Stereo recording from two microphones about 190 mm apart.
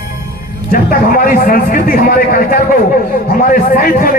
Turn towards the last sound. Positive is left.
turn(degrees=45)  # may be behind; listen again after turning